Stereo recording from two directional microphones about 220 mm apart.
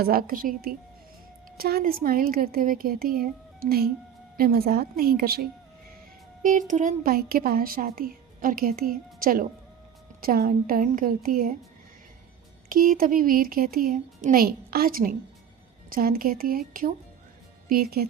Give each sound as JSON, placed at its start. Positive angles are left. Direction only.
{"t": 0.0, "sound": "a woman's voice", "side_deg": -40}
{"t": 12.6, "sound": "a woman's voice", "side_deg": -40}